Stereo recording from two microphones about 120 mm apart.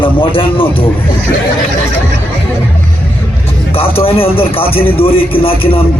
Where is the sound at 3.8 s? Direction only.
50° left (ahead or behind).